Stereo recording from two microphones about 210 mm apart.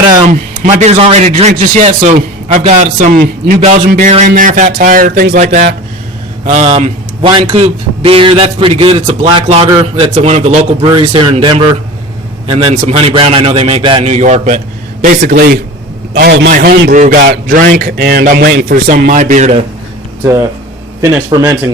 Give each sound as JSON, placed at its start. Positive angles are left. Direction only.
{"t": 0.3, "sound": "a man's voice", "side_deg": -35}
{"t": 16.5, "sound": "a man's voice", "side_deg": -40}
{"t": 20.2, "sound": "speech", "side_deg": -15}